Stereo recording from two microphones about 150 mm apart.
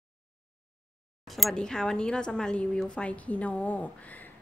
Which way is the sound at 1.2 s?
Centre (ahead or behind).